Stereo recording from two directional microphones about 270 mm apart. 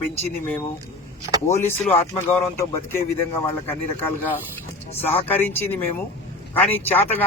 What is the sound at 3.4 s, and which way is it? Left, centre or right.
Speech, centre.